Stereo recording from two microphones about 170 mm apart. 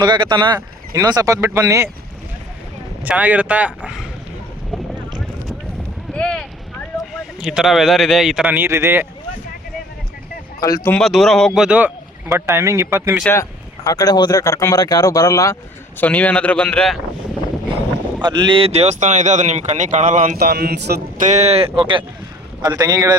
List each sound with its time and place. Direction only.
0.0 s speech: 25° right (ahead or behind)
3.0 s speech: 10° right (ahead or behind)
6.1 s a sound: 5° left (ahead or behind)
7.1 s speech: 5° right (ahead or behind)
10.8 s speech: 5° left (ahead or behind)
12.3 s speech: 15° right (ahead or behind)
13.2 s speech: 15° left (ahead or behind)
18.2 s speech: 25° right (ahead or behind); by 20.4 s 45° right (ahead or behind)
20.4 s a man's voice: 65° right (ahead or behind)
21.2 s speech: 40° right (ahead or behind); by 23.1 s 20° right (ahead or behind)